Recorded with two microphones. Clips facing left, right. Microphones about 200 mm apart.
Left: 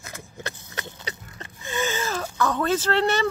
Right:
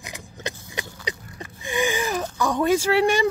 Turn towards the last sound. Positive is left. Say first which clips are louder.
# right 3 dB
turn(degrees=-10)  # may be behind; listen again after turning